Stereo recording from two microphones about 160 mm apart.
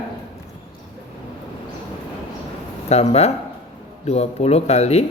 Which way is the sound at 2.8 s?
40° left (ahead or behind).